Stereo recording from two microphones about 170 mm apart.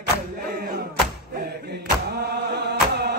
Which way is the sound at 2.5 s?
75° right (ahead or behind).